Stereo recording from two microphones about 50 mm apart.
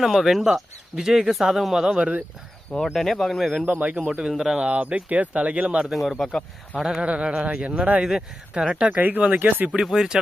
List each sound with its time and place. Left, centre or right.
0.0 s speech: centre
2.0 s speech: right
2.8 s speech: centre
3.7 s speech: right
4.0 s speech: centre
4.6 s speech: right
5.8 s speech: centre
7.0 s speech: right
9.4 s speech: right
9.8 s speech: centre